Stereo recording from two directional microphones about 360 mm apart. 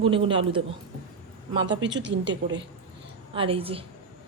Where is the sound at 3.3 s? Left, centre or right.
Centre.